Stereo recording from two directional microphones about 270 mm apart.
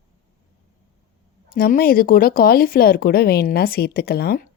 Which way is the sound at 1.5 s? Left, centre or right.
Left.